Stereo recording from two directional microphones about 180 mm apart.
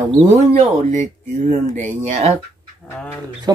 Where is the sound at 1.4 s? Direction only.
40° right (ahead or behind).